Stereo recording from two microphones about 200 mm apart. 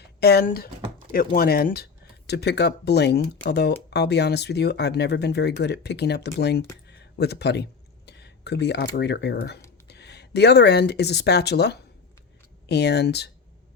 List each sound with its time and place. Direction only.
0.2 s speech: 50° left (ahead or behind)
6.8 s a sound: 55° left (ahead or behind)
9.8 s speech: 55° left (ahead or behind)